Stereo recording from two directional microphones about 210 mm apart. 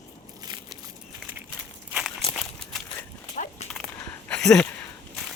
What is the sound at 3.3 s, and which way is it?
Horse, 35° left (ahead or behind).